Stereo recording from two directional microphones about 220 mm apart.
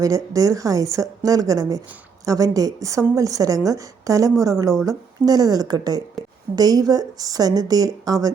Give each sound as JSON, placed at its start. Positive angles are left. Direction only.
{"t": 0.0, "sound": "speech", "side_deg": -15}